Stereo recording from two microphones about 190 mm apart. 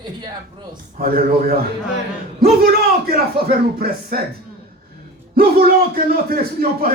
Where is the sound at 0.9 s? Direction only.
50° right (ahead or behind).